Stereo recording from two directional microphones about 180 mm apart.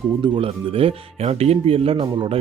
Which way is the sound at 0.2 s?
30° right (ahead or behind).